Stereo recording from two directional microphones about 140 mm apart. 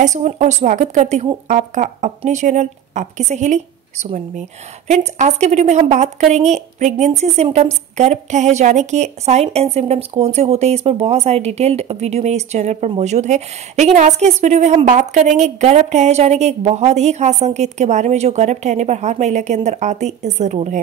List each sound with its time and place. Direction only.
0.0 s a woman's voice: 60° right (ahead or behind)